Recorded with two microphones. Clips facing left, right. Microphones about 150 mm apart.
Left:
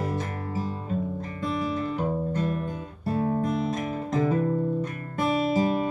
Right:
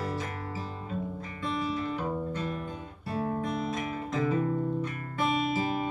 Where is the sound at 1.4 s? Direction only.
45° left (ahead or behind).